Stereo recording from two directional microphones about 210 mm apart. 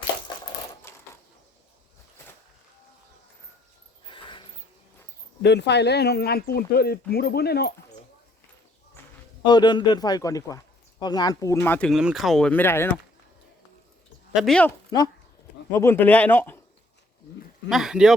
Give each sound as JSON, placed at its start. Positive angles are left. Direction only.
{"t": 0.9, "sound": "mechanisms", "side_deg": 15}
{"t": 4.0, "sound": "a sound", "side_deg": 25}
{"t": 5.4, "sound": "speech", "side_deg": 55}
{"t": 9.0, "sound": "a sound", "side_deg": 10}
{"t": 9.4, "sound": "a man's voice", "side_deg": 20}
{"t": 14.3, "sound": "speech", "side_deg": 0}
{"t": 14.8, "sound": "speech", "side_deg": 20}
{"t": 17.7, "sound": "speech", "side_deg": 0}